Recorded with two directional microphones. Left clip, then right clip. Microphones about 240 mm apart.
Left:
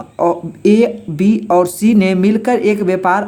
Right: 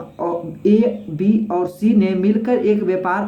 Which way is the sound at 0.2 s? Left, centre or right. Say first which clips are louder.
Left 7 dB; left.